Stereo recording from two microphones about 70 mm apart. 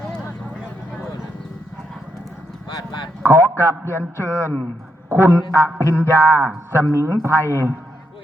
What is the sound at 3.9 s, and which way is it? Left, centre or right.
Speech, left.